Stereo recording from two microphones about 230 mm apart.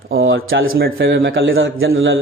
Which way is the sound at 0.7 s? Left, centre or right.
Right.